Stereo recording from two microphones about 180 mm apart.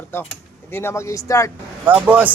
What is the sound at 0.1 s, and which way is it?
Speech, 10° left (ahead or behind).